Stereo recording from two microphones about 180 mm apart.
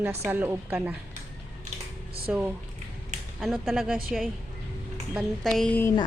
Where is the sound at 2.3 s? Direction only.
5° right (ahead or behind).